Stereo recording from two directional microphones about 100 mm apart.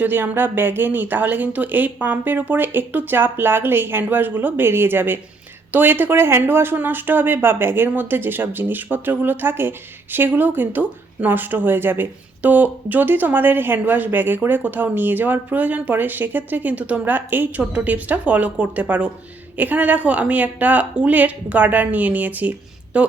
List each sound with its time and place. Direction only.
0.0 s a woman's voice: 20° right (ahead or behind)